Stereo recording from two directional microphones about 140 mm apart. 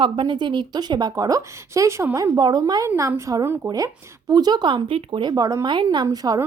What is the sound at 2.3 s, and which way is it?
A woman's voice, 30° right (ahead or behind).